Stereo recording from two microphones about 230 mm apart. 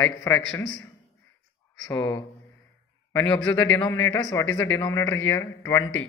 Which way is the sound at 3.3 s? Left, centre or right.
Centre.